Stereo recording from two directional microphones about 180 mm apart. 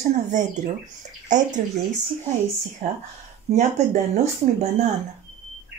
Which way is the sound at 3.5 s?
35° right (ahead or behind).